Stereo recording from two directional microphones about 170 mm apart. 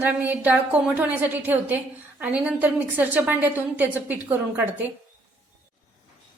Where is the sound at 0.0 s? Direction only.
10° right (ahead or behind).